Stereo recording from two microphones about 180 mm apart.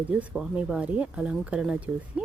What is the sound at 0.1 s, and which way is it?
Speech, 5° right (ahead or behind).